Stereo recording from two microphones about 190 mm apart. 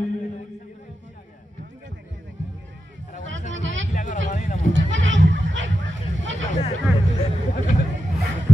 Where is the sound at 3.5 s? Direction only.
75° right (ahead or behind).